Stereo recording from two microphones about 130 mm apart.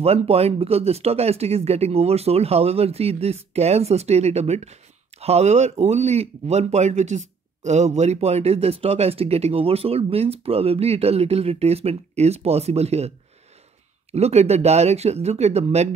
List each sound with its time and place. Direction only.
0.0 s speech: 50° right (ahead or behind)
14.1 s speech: 55° right (ahead or behind)